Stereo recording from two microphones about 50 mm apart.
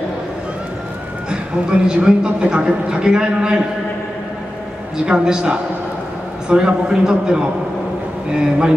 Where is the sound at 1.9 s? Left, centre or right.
Centre.